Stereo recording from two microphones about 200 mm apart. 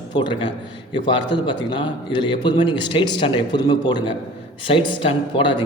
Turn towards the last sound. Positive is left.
turn(degrees=25)  # may be behind; listen again after turning